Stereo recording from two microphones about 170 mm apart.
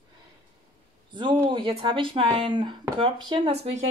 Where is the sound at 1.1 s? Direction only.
30° right (ahead or behind).